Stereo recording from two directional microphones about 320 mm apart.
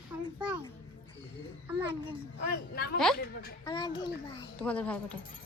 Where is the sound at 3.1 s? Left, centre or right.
Left.